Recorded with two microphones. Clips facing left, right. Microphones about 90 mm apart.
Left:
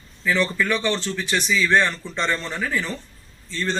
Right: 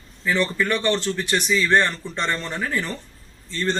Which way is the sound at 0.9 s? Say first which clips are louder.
Right 2 dB; 15° right (ahead or behind).